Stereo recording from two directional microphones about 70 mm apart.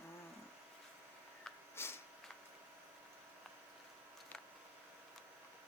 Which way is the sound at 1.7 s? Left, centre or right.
Left.